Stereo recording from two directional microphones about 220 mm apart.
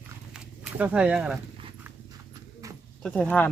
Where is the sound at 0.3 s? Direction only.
5° right (ahead or behind).